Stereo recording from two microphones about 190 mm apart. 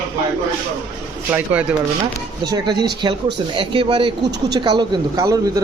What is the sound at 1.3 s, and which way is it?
Speech, 10° right (ahead or behind).